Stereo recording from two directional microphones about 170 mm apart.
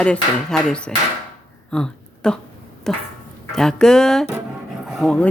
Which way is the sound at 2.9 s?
5° left (ahead or behind).